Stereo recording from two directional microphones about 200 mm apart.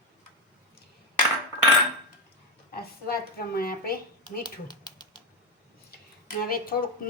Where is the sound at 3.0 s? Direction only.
50° left (ahead or behind).